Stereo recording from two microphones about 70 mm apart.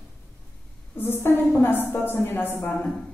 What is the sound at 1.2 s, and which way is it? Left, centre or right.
Speech, left.